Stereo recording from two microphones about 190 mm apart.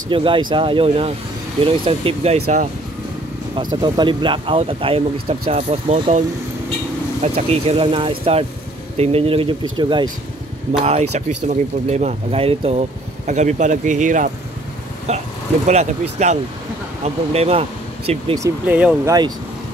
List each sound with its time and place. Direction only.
0.1 s speech: 25° right (ahead or behind)
3.5 s speech: 25° right (ahead or behind)
10.8 s speech: 35° right (ahead or behind)
18.4 s speech: 10° right (ahead or behind)